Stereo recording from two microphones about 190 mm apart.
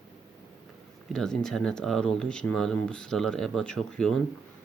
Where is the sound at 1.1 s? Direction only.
5° left (ahead or behind).